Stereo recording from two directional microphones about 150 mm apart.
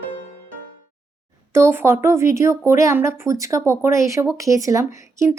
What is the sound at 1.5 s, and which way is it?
A woman's voice, 15° right (ahead or behind).